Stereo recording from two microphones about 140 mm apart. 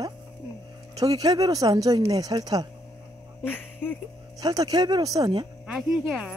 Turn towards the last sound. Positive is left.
turn(degrees=0)  # may be behind; listen again after turning